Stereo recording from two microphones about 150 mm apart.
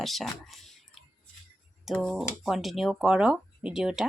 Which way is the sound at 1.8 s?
Centre (ahead or behind).